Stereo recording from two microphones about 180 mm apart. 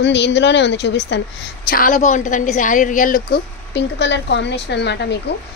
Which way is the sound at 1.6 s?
50° left (ahead or behind).